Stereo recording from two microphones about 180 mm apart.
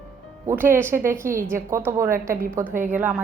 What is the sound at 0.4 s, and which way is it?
A woman's voice, 10° right (ahead or behind).